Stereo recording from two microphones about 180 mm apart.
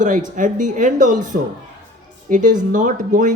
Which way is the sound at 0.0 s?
45° right (ahead or behind).